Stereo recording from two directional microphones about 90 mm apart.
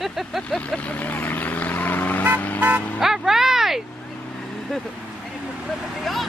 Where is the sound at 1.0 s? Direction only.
20° left (ahead or behind).